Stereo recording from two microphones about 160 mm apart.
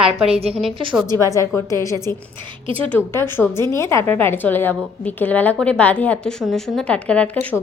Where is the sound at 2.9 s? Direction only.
15° left (ahead or behind).